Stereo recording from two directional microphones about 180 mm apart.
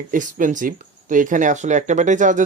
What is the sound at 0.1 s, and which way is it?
Speech, 50° right (ahead or behind).